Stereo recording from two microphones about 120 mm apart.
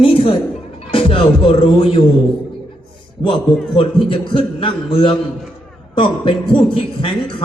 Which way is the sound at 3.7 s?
45° left (ahead or behind).